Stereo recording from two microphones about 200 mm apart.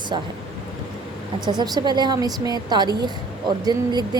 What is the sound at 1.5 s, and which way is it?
A woman's voice, 20° right (ahead or behind).